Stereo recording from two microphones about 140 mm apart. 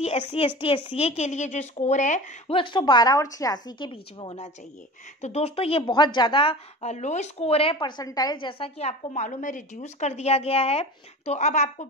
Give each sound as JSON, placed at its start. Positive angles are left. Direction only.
{"t": 0.3, "sound": "a woman's voice", "side_deg": 40}
{"t": 2.5, "sound": "speech", "side_deg": 35}
{"t": 5.2, "sound": "speech", "side_deg": 50}
{"t": 6.8, "sound": "a woman's voice", "side_deg": 55}
{"t": 8.0, "sound": "a woman's voice", "side_deg": 25}